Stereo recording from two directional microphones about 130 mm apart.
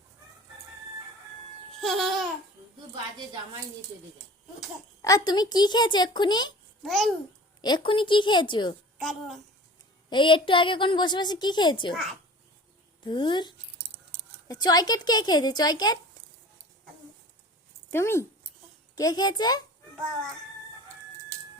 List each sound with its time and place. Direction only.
1.8 s babbling: centre (ahead or behind)
5.0 s a woman's voice: 30° left (ahead or behind)
6.8 s a child's voice: centre (ahead or behind)
7.6 s a woman's voice: 35° left (ahead or behind)
9.0 s a woman's voice: centre (ahead or behind)
10.1 s a woman's voice: 40° left (ahead or behind)
13.1 s a woman's voice: 35° left (ahead or behind)
17.9 s speech: 20° left (ahead or behind)
18.9 s a woman's voice: 30° left (ahead or behind)